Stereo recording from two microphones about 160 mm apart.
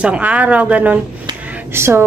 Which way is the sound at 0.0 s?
5° right (ahead or behind).